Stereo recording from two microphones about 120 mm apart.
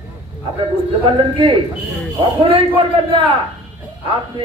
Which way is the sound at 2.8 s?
45° right (ahead or behind).